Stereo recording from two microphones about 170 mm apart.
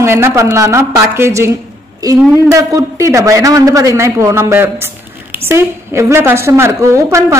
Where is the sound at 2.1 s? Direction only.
Centre (ahead or behind).